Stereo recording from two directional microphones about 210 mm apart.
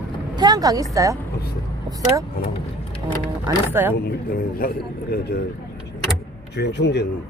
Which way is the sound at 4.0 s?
45° left (ahead or behind).